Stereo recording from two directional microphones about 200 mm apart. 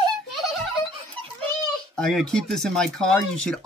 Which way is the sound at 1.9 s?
5° left (ahead or behind).